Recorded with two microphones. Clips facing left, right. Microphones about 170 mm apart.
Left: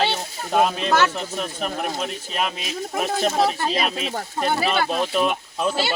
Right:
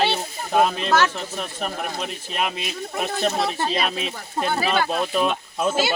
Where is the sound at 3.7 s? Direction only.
Centre (ahead or behind).